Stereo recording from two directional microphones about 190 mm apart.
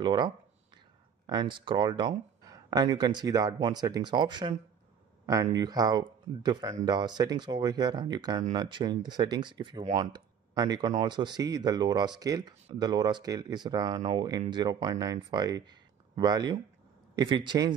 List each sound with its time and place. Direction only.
0.0 s speech: 25° right (ahead or behind)